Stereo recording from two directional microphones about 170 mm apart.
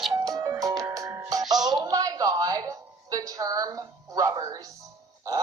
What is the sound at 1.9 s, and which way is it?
A woman's voice, 20° right (ahead or behind).